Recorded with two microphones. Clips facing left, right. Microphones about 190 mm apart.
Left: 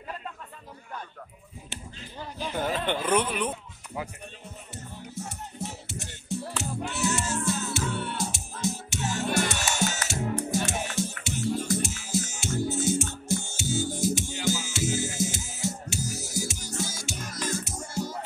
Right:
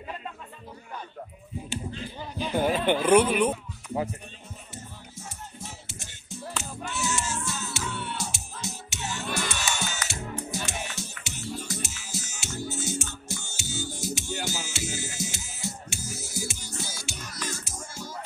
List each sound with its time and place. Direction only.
2.5 s speech: 10° right (ahead or behind)
3.9 s speech: 35° right (ahead or behind)
5.1 s music: 65° left (ahead or behind)